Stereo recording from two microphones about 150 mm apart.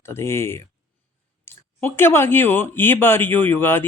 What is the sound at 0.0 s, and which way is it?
Speech, 15° left (ahead or behind).